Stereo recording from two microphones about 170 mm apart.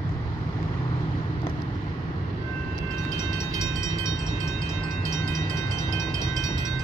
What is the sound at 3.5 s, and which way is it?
Train, 20° left (ahead or behind).